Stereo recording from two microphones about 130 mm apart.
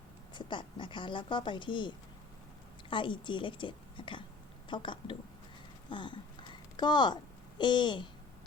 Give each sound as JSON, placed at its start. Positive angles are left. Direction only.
{"t": 0.3, "sound": "speech", "side_deg": 40}
{"t": 2.9, "sound": "speech", "side_deg": 40}
{"t": 5.9, "sound": "a sound", "side_deg": 40}
{"t": 7.6, "sound": "speech", "side_deg": 35}